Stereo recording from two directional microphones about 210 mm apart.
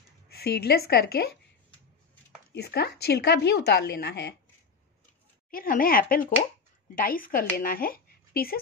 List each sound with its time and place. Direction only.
0.3 s speech: 50° left (ahead or behind)
2.5 s speech: 50° left (ahead or behind)
5.5 s speech: 45° left (ahead or behind)